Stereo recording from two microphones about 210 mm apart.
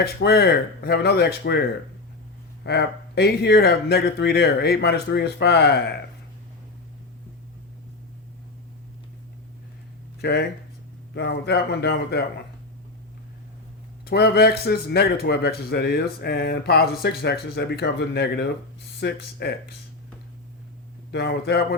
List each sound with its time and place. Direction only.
0.0 s a man's voice: 50° left (ahead or behind)
10.2 s a man's voice: 50° left (ahead or behind)
14.0 s a man's voice: 50° left (ahead or behind)
21.1 s a man's voice: 50° left (ahead or behind)